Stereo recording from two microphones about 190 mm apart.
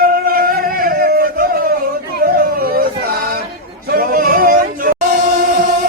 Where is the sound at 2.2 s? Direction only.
50° right (ahead or behind).